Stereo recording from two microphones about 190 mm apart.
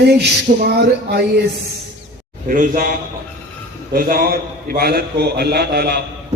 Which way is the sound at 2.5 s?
45° right (ahead or behind).